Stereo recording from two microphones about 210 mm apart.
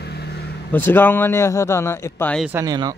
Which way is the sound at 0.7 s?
10° left (ahead or behind).